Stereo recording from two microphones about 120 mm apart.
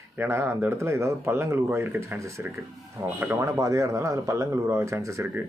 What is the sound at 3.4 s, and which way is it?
Speech, 25° right (ahead or behind).